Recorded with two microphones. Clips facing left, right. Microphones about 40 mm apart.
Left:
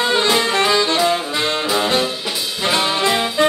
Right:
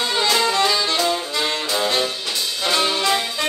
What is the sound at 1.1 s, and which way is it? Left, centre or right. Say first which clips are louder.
Saxophone: left 3 dB; left.